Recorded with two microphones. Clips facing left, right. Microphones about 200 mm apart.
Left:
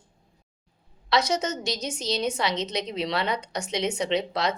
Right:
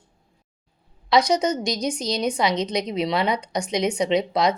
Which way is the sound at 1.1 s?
15° right (ahead or behind).